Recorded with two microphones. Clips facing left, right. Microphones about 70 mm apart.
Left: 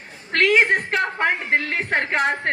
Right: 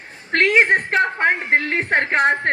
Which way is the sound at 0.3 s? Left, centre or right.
Right.